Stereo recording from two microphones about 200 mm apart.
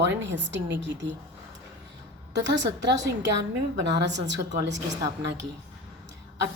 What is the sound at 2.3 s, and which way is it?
A woman's voice, 65° right (ahead or behind).